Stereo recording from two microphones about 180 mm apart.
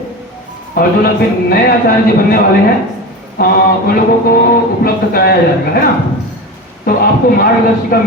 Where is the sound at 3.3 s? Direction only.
55° left (ahead or behind).